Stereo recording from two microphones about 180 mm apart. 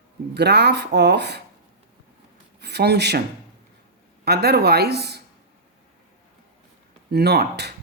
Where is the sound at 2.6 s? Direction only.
65° right (ahead or behind).